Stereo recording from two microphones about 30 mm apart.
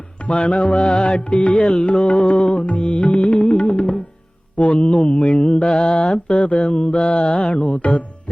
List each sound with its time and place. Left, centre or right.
0.4 s music: left
2.4 s music: left
4.5 s mantra: left
4.9 s mantra: left
6.2 s music: left